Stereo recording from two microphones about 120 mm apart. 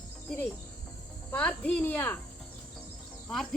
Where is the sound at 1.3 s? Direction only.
10° left (ahead or behind).